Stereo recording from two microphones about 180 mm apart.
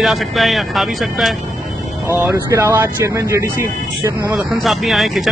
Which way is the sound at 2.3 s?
15° right (ahead or behind).